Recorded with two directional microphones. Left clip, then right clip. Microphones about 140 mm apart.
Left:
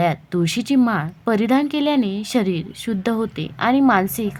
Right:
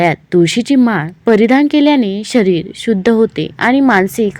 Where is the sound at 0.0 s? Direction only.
25° right (ahead or behind).